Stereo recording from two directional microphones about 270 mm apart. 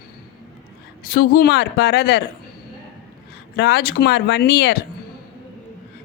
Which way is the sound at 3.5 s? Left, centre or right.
Left.